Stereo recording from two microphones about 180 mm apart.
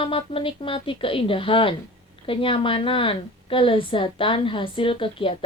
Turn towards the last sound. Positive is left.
turn(degrees=30)  # may be behind; listen again after turning